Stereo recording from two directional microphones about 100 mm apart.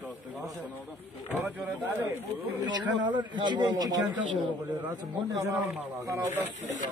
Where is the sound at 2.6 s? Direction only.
45° right (ahead or behind).